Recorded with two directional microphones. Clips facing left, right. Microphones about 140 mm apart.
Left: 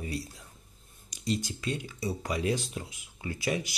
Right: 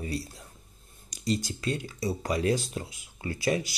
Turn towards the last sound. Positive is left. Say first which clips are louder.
# right 3 dB
turn(degrees=-35)  # may be behind; listen again after turning